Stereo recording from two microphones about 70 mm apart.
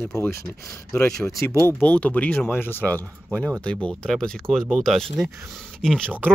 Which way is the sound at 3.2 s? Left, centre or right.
Centre.